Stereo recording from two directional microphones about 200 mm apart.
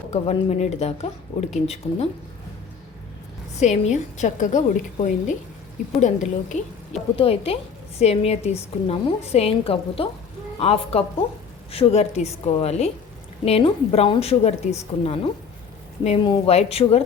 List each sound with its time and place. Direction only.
0.1 s a woman's voice: 35° left (ahead or behind)
3.6 s a woman's voice: 35° left (ahead or behind)